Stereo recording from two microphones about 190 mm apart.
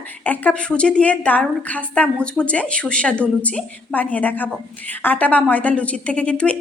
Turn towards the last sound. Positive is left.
turn(degrees=5)  # may be behind; listen again after turning